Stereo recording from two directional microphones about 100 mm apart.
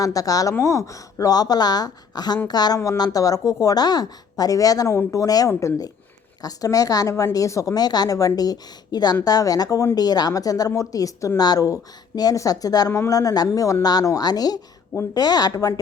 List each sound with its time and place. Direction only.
0.0 s a woman's voice: 35° left (ahead or behind)